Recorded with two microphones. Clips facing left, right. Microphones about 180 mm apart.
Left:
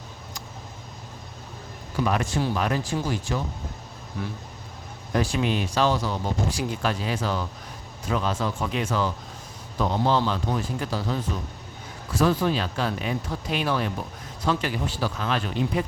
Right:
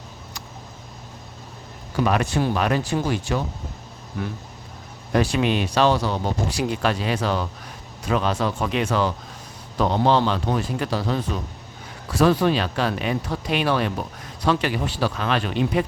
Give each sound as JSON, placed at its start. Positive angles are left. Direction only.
{"t": 2.0, "sound": "speech", "side_deg": -70}
{"t": 5.1, "sound": "speech", "side_deg": -70}